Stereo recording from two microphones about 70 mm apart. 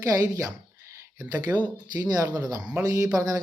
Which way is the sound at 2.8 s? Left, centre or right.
Right.